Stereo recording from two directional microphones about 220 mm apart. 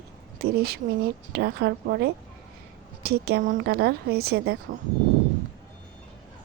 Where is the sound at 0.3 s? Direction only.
45° right (ahead or behind).